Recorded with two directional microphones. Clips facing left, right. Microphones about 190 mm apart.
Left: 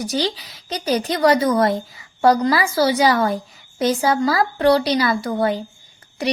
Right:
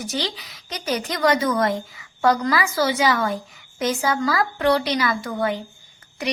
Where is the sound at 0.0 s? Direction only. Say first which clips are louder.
Left 5 dB; 35° left (ahead or behind).